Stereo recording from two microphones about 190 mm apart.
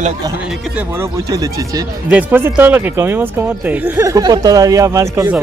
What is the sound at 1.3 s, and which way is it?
Speech, 20° right (ahead or behind).